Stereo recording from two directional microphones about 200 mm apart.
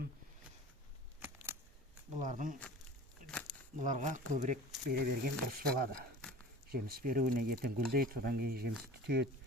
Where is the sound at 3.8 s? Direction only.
40° right (ahead or behind).